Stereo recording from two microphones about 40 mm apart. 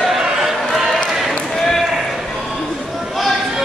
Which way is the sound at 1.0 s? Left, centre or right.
Centre.